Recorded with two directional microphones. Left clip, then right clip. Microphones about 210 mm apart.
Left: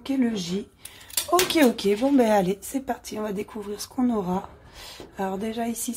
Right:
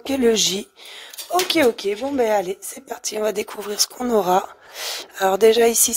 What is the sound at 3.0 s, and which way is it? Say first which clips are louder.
Speech: right 8 dB; 40° right (ahead or behind).